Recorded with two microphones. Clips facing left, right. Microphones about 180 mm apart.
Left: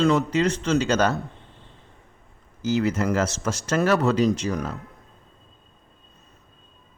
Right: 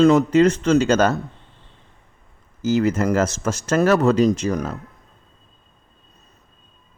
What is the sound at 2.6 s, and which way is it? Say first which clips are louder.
A man's voice: right 4 dB; 45° right (ahead or behind).